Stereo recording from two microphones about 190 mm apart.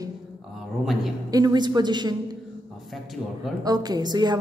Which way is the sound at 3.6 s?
20° right (ahead or behind).